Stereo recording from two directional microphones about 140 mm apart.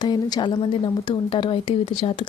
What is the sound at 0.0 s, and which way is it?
A woman's voice, 30° left (ahead or behind).